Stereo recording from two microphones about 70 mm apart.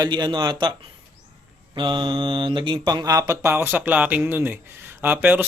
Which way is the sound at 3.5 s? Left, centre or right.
Right.